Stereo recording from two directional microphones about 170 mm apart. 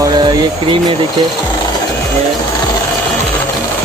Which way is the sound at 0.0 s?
25° right (ahead or behind).